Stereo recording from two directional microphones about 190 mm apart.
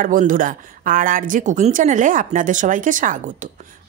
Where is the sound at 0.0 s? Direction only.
45° right (ahead or behind).